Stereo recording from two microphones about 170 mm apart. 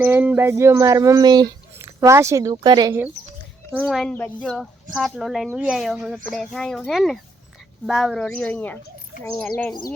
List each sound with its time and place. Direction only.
0.0 s speech: 10° right (ahead or behind)
3.8 s speech: centre (ahead or behind)